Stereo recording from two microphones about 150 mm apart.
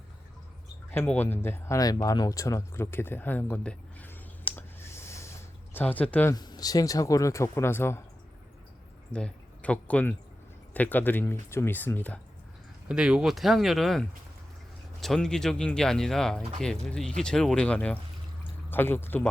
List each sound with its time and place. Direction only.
0.9 s speech: 10° left (ahead or behind)
6.3 s speech: 25° left (ahead or behind)
9.1 s speech: 10° left (ahead or behind)
12.9 s speech: 5° right (ahead or behind)
15.0 s speech: 5° left (ahead or behind)